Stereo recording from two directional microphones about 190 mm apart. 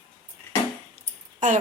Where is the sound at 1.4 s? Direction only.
40° right (ahead or behind).